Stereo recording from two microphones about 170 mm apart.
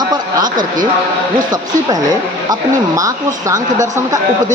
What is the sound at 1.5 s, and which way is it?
Speech, 20° right (ahead or behind).